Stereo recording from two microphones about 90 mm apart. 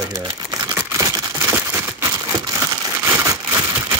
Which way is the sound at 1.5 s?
15° right (ahead or behind).